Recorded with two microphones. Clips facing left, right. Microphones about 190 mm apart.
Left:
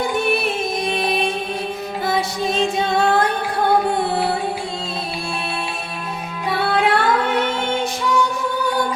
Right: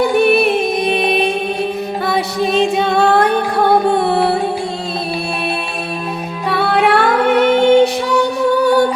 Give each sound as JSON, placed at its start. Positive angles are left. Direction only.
{"t": 0.0, "sound": "music", "side_deg": -65}
{"t": 6.7, "sound": "music", "side_deg": -65}